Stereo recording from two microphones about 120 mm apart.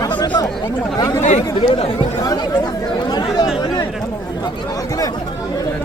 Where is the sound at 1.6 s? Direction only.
50° left (ahead or behind).